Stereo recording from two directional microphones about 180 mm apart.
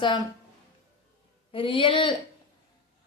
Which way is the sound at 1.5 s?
30° left (ahead or behind).